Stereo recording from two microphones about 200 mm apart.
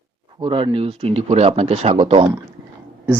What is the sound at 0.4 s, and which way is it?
Speech, 25° right (ahead or behind).